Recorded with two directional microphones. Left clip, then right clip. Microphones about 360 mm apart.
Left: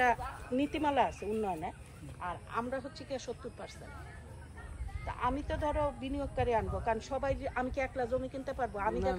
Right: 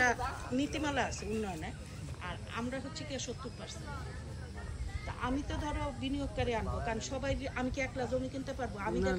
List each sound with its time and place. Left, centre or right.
0.6 s speech: centre
5.0 s speech: centre